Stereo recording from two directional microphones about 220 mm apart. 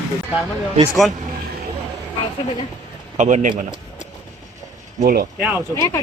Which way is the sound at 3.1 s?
35° right (ahead or behind).